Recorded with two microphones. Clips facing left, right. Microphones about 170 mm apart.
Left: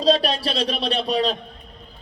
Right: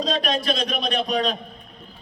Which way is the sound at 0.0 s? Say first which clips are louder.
Left 4 dB; 35° left (ahead or behind).